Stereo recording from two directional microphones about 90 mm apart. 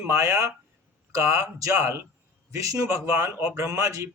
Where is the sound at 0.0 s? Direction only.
30° right (ahead or behind).